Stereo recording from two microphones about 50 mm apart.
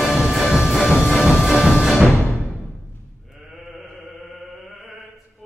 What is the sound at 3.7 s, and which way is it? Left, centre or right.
Chant, centre.